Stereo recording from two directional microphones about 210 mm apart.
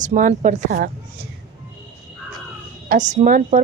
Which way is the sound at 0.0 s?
35° right (ahead or behind).